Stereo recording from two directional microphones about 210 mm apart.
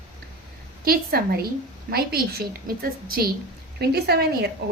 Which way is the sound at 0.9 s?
45° right (ahead or behind).